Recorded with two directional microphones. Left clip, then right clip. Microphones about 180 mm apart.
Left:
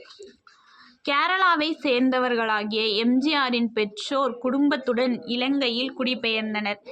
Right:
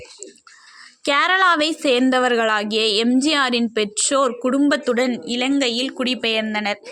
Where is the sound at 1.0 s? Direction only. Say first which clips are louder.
Right 5 dB; 25° right (ahead or behind).